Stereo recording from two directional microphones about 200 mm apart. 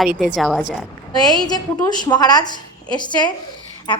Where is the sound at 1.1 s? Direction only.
20° left (ahead or behind).